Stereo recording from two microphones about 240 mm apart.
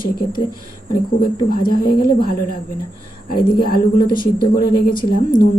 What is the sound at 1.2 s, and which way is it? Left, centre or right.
A woman's voice, left.